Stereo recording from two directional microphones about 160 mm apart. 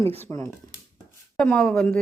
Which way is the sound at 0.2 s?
20° left (ahead or behind).